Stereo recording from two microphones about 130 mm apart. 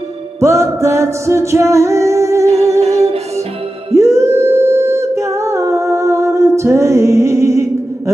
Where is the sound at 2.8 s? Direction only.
55° right (ahead or behind).